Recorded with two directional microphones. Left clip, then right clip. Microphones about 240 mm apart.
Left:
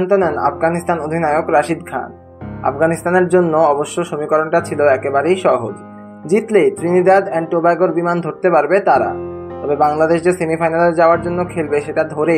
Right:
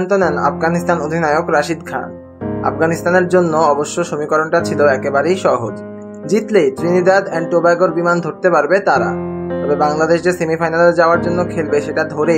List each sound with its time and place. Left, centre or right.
0.0 s speech: centre
6.3 s speech: centre